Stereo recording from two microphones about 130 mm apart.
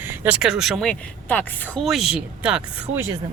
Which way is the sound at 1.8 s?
Centre (ahead or behind).